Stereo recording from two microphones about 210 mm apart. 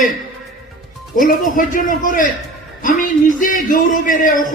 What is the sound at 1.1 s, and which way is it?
A man's voice, 40° left (ahead or behind).